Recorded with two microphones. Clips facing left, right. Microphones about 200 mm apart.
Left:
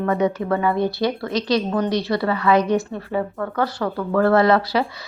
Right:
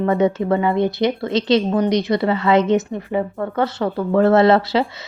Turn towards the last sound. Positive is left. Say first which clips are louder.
# right 3 dB
turn(degrees=-25)  # may be behind; listen again after turning